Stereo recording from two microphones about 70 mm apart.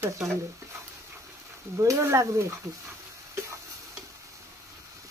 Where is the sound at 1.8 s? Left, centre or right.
Right.